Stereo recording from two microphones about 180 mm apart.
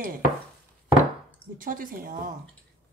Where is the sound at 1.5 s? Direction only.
50° right (ahead or behind).